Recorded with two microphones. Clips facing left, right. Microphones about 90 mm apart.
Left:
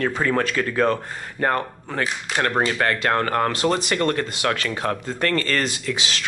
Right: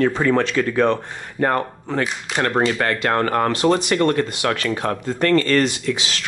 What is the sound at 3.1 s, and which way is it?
Speech, 20° right (ahead or behind).